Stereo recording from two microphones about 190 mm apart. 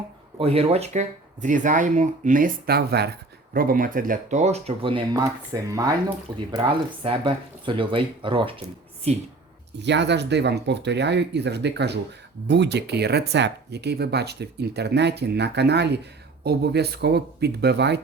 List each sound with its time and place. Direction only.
0.3 s speech: 30° right (ahead or behind)
9.8 s speech: 65° right (ahead or behind)